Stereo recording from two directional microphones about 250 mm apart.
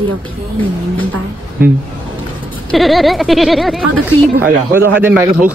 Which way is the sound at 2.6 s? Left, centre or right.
Centre.